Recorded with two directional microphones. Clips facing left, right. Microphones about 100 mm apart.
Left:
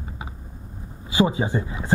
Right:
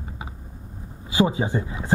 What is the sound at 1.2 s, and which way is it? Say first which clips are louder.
Speech: even; 20° left (ahead or behind).